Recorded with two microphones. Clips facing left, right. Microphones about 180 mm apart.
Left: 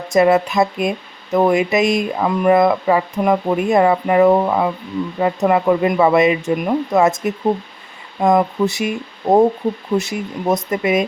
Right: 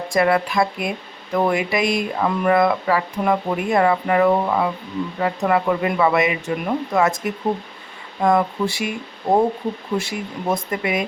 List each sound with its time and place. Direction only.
0.1 s speech: 20° left (ahead or behind)